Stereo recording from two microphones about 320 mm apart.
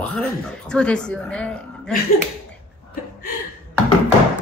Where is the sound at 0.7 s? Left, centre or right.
Centre.